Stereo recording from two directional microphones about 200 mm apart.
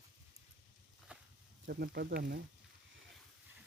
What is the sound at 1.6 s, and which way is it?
Speech, 50° right (ahead or behind).